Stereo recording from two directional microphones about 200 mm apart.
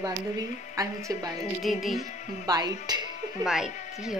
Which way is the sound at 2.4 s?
20° right (ahead or behind).